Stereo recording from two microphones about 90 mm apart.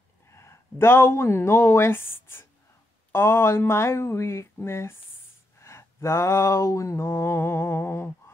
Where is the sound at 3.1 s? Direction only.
30° left (ahead or behind).